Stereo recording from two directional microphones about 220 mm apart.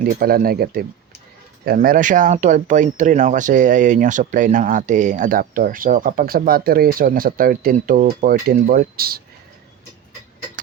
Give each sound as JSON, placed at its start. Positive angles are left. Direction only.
{"t": 0.0, "sound": "speech", "side_deg": -40}